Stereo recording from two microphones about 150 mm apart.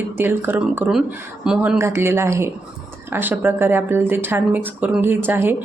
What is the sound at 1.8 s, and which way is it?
Speech, 15° right (ahead or behind).